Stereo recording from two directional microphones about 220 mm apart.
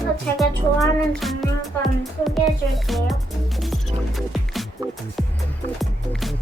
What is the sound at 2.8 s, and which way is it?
Music, centre (ahead or behind).